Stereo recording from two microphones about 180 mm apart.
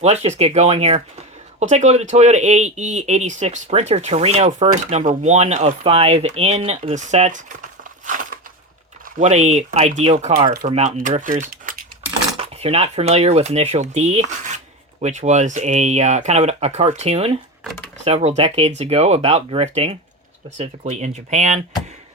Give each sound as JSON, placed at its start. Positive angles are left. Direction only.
{"t": 0.0, "sound": "speech", "side_deg": -35}
{"t": 8.0, "sound": "a sound", "side_deg": -45}
{"t": 9.1, "sound": "speech", "side_deg": -40}
{"t": 12.4, "sound": "speech", "side_deg": -35}